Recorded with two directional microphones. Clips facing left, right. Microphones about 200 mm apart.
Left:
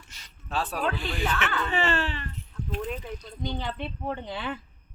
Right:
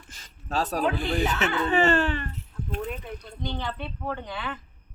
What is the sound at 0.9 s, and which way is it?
Speech, 50° right (ahead or behind).